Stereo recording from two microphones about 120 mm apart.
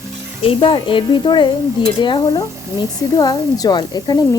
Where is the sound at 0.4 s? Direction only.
45° left (ahead or behind).